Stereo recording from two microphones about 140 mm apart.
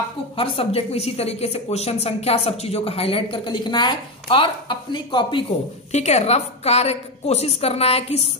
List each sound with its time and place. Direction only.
0.4 s a woman's voice: 45° left (ahead or behind)
5.9 s a woman's voice: 55° left (ahead or behind)